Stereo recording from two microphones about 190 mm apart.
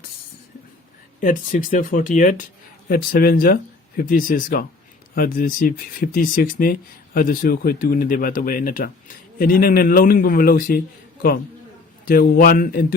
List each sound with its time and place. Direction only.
1.2 s speech: 45° left (ahead or behind)